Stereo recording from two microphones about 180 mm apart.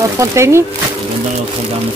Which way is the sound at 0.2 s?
15° right (ahead or behind).